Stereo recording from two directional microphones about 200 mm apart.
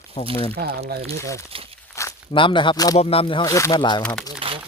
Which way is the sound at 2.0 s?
20° left (ahead or behind).